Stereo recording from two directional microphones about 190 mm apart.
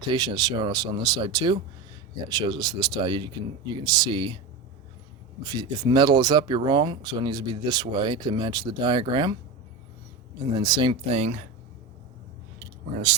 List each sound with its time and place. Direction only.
0.1 s speech: 25° right (ahead or behind)
5.4 s speech: 20° right (ahead or behind)
10.5 s speech: 20° right (ahead or behind)
11.2 s speech: 40° right (ahead or behind)